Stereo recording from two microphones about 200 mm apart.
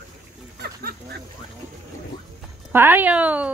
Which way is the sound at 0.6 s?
50° right (ahead or behind).